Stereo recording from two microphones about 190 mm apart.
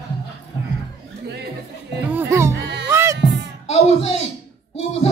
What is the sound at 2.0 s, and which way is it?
Music, 10° right (ahead or behind).